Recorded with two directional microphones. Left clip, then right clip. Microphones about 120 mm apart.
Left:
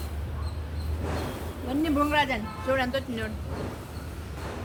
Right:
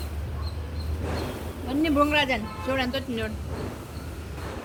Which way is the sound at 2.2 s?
55° left (ahead or behind).